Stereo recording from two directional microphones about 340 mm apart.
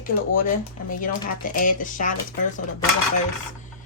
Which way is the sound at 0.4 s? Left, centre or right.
Left.